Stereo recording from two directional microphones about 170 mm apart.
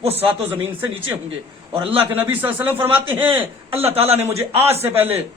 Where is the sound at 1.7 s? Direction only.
30° right (ahead or behind).